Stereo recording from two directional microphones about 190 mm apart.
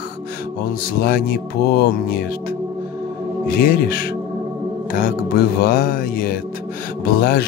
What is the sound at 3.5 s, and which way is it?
Music, 50° left (ahead or behind).